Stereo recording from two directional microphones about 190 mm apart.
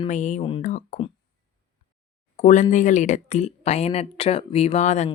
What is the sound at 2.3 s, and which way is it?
Speech, 40° left (ahead or behind).